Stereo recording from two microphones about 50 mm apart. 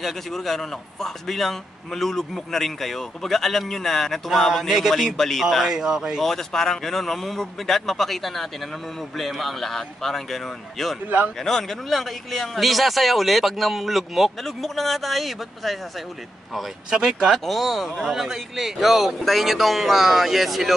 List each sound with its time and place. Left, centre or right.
0.0 s a man's voice: centre
5.1 s a man's voice: centre
6.2 s a man's voice: centre
11.1 s speech: right
11.3 s a man's voice: centre
16.9 s a man's voice: centre